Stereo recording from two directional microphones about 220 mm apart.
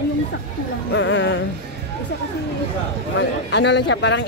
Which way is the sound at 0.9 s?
55° left (ahead or behind).